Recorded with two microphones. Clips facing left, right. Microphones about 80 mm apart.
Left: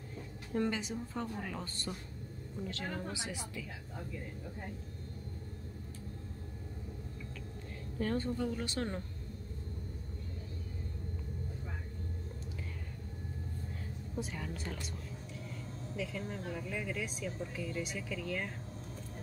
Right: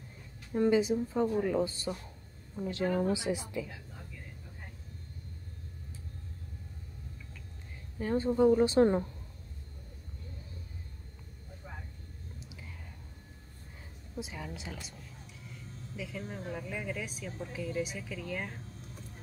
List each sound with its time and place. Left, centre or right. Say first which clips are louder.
0.5 s speech: right 8 dB; centre
8.0 s speech: right 8 dB; centre
14.2 s speech: left 1 dB; centre
16.0 s speech: even; centre